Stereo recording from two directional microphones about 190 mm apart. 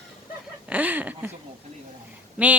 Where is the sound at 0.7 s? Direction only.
10° right (ahead or behind).